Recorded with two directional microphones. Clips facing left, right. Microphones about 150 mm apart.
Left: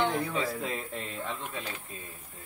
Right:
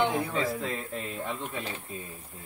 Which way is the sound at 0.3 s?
Centre (ahead or behind).